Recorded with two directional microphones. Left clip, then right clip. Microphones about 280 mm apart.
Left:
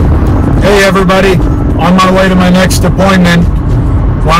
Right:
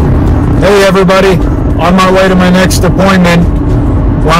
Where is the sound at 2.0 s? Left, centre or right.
Centre.